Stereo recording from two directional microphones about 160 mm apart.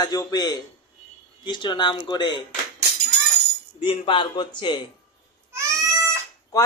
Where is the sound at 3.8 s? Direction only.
35° left (ahead or behind).